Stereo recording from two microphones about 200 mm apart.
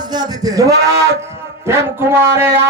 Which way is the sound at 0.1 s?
20° right (ahead or behind).